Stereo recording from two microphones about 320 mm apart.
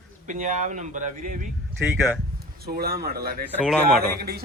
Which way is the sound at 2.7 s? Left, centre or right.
Right.